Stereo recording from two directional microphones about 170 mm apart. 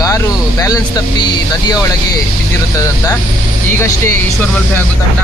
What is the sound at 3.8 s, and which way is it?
Speech, 15° left (ahead or behind).